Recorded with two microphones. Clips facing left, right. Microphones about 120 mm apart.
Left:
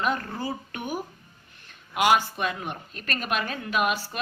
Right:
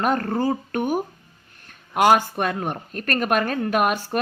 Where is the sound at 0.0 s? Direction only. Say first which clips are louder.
Right 7 dB; 50° right (ahead or behind).